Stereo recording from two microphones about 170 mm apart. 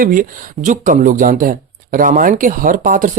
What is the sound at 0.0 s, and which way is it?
Speech, 55° right (ahead or behind).